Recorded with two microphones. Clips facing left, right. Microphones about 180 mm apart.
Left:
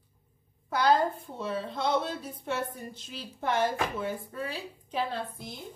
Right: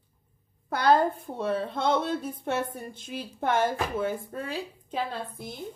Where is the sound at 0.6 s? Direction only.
55° right (ahead or behind).